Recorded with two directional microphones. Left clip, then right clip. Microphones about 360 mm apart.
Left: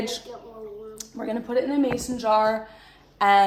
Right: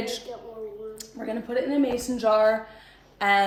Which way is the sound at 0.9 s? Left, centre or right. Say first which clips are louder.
Left 5 dB; centre.